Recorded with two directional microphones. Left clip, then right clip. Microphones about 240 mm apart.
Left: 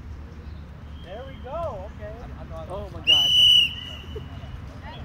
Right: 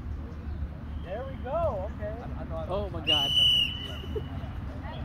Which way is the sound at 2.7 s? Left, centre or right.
Right.